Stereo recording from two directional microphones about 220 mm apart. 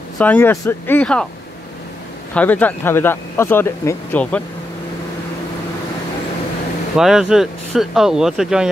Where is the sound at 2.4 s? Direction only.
5° left (ahead or behind).